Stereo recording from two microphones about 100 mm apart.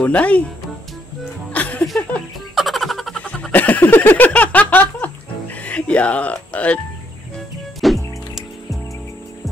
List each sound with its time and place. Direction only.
0.0 s speech: 15° left (ahead or behind)
1.5 s music: 15° left (ahead or behind)
2.5 s music: centre (ahead or behind)
3.2 s a sound: 10° left (ahead or behind)
5.6 s speech: 10° left (ahead or behind)
7.3 s music: centre (ahead or behind)